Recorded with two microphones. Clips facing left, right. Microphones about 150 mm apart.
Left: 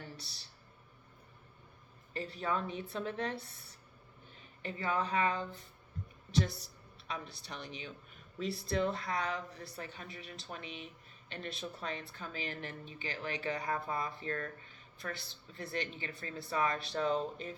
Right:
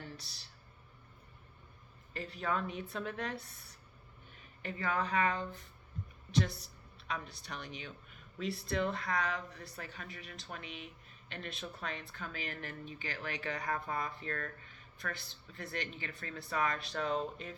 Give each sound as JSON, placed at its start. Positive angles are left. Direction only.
{"t": 0.2, "sound": "speech", "side_deg": 35}
{"t": 2.1, "sound": "a woman's voice", "side_deg": 35}